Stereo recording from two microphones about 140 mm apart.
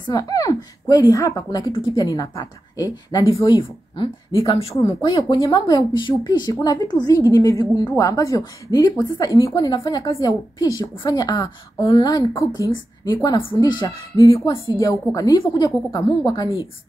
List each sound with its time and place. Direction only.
0.0 s a woman's voice: 25° left (ahead or behind); by 4.7 s 40° left (ahead or behind)
5.0 s speech: 30° left (ahead or behind)